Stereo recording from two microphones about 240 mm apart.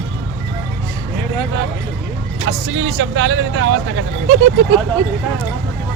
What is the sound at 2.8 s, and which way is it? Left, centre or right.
Speech, right.